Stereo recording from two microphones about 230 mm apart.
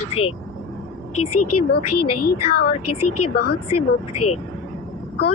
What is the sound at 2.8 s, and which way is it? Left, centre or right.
Speech, left.